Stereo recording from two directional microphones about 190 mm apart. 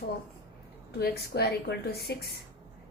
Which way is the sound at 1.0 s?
60° left (ahead or behind).